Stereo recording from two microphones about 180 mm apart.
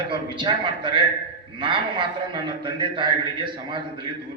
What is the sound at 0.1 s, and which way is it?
A man's voice, 25° right (ahead or behind).